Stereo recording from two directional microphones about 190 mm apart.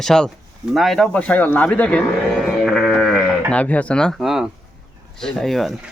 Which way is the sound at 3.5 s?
5° left (ahead or behind).